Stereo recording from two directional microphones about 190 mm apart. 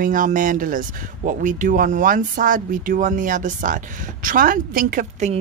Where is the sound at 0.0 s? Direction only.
45° right (ahead or behind).